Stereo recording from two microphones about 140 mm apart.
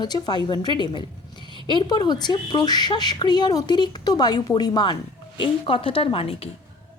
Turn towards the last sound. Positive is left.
turn(degrees=45)  # may be behind; listen again after turning